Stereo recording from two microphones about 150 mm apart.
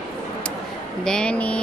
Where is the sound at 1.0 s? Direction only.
5° left (ahead or behind).